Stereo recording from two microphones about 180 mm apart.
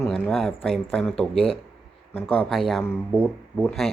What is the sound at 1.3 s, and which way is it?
Speech, 30° left (ahead or behind).